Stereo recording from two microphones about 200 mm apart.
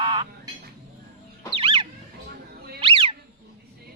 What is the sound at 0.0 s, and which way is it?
Frog, 25° right (ahead or behind).